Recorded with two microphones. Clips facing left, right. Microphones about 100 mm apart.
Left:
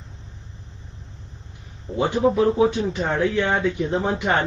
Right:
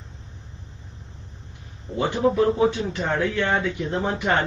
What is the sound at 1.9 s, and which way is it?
Speech, 30° left (ahead or behind).